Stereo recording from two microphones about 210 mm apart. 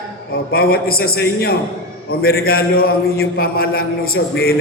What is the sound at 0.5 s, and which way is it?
Speech, 45° left (ahead or behind).